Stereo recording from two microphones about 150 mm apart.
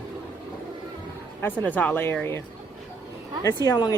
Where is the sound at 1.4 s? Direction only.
10° left (ahead or behind).